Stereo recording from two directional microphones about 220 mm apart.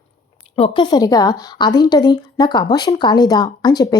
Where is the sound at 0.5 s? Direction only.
25° left (ahead or behind).